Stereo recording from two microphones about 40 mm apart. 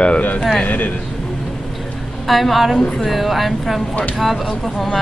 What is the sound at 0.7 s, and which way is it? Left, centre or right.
Speech, left.